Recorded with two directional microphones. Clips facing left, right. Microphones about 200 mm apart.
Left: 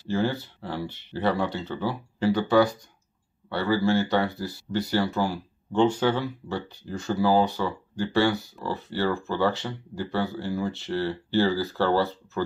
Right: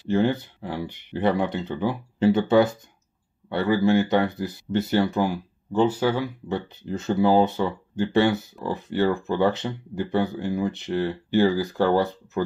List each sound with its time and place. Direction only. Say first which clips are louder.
0.1 s speech: right 4 dB; 20° right (ahead or behind)
5.7 s speech: right 1 dB; 5° right (ahead or behind)
6.8 s speech: right 4 dB; 20° right (ahead or behind)